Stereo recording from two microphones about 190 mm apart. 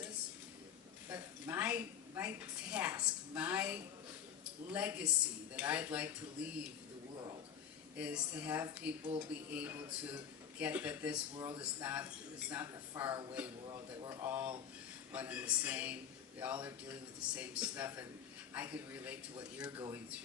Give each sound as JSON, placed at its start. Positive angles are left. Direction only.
{"t": 1.1, "sound": "a woman's voice", "side_deg": -10}
{"t": 7.9, "sound": "a man's voice", "side_deg": -5}
{"t": 11.3, "sound": "speech", "side_deg": -20}
{"t": 11.8, "sound": "a man's voice", "side_deg": -10}